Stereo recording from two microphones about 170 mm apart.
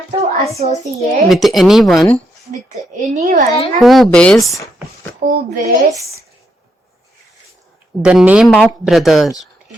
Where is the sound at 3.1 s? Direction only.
45° right (ahead or behind).